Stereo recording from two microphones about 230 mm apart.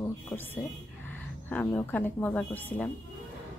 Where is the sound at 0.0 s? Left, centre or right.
Centre.